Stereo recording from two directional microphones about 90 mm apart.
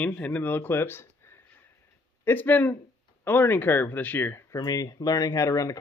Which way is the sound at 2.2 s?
20° left (ahead or behind).